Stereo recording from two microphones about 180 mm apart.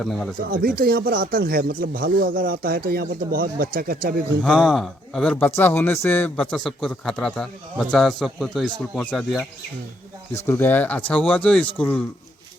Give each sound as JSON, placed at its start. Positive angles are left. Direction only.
{"t": 0.0, "sound": "a man's voice", "side_deg": 0}
{"t": 0.4, "sound": "speech", "side_deg": -55}
{"t": 4.4, "sound": "a man's voice", "side_deg": 0}
{"t": 10.3, "sound": "speech", "side_deg": 15}